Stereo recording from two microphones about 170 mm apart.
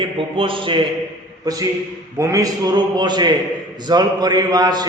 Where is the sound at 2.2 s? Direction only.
20° right (ahead or behind).